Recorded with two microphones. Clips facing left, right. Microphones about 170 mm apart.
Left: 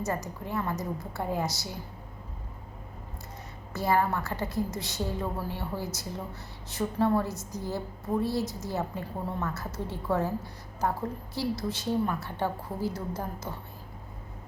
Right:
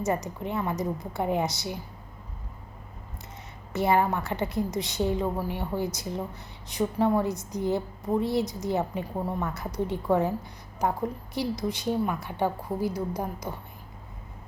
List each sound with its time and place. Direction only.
0.0 s a woman's voice: 20° right (ahead or behind)
3.7 s a woman's voice: 20° right (ahead or behind)